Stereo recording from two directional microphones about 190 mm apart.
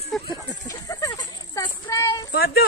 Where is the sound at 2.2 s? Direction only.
55° left (ahead or behind).